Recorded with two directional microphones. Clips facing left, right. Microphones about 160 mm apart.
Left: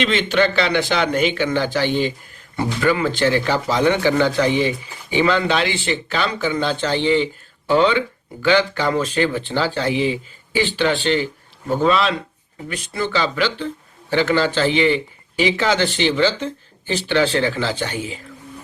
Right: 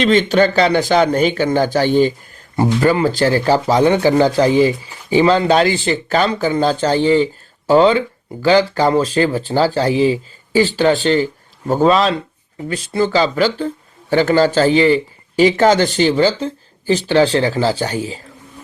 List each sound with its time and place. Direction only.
0.0 s a man's voice: 40° right (ahead or behind)